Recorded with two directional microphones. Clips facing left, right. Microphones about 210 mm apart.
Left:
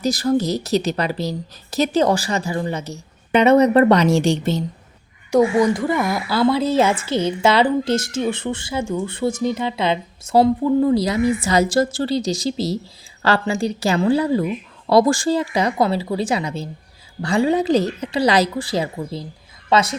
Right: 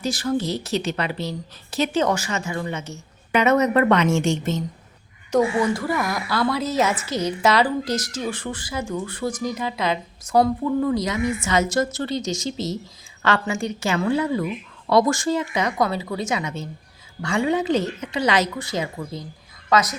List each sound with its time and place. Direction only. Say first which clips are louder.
0.0 s a woman's voice: left 5 dB; 40° left (ahead or behind)
5.3 s a woman's voice: left 4 dB; 15° left (ahead or behind)